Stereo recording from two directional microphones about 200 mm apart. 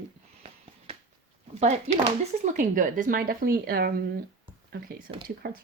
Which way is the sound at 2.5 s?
40° right (ahead or behind).